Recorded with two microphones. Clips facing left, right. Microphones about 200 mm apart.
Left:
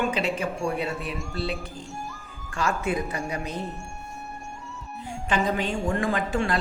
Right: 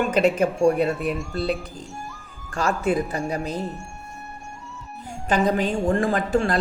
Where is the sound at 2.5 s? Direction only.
35° right (ahead or behind).